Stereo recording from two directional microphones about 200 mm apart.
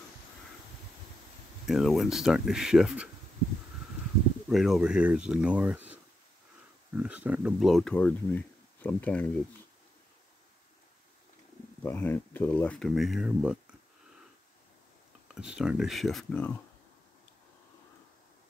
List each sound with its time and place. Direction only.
1.7 s speech: centre (ahead or behind)
4.5 s speech: centre (ahead or behind)
7.0 s speech: 5° right (ahead or behind)
11.8 s speech: 10° left (ahead or behind)
15.3 s speech: 5° right (ahead or behind)